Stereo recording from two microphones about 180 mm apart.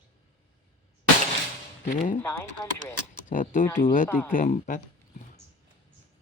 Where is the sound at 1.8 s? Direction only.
45° left (ahead or behind).